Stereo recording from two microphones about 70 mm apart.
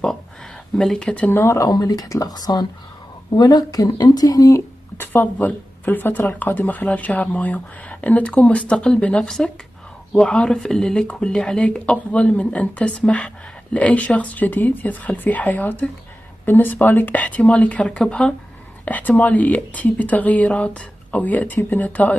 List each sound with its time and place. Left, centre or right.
0.7 s speech: centre
1.3 s speech: left
1.7 s speech: left
4.9 s speech: left; by 18.3 s centre
18.9 s speech: left